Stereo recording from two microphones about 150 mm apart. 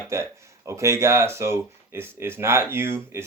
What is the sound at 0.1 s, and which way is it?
Speech, 20° right (ahead or behind).